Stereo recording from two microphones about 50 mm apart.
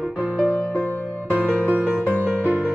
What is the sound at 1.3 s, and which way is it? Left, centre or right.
Music, right.